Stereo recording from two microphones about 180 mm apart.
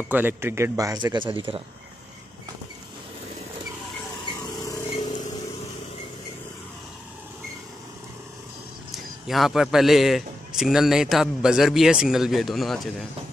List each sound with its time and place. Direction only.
0.1 s speech: 10° right (ahead or behind); by 1.6 s 30° right (ahead or behind)
4.4 s vehicle: 20° left (ahead or behind)
8.9 s a man's voice: centre (ahead or behind)